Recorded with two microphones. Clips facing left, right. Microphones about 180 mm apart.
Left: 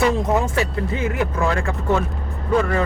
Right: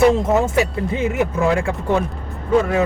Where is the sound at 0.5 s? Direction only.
20° right (ahead or behind).